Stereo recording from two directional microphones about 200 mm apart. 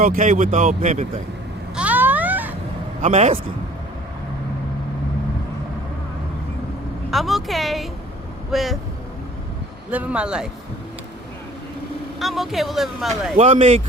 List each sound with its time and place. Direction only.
0.0 s speech: 40° right (ahead or behind)
1.7 s a sound: 5° right (ahead or behind)
3.0 s speech: 35° right (ahead or behind)
7.1 s speech: centre (ahead or behind)
9.9 s speech: 5° right (ahead or behind)
12.2 s speech: centre (ahead or behind)
13.3 s speech: 30° right (ahead or behind)